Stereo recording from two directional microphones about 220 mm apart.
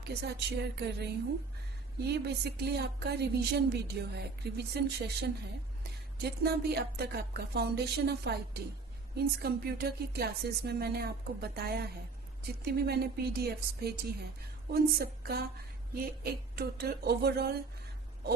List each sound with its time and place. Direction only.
0.0 s speech: 50° right (ahead or behind)
2.0 s speech: 50° right (ahead or behind)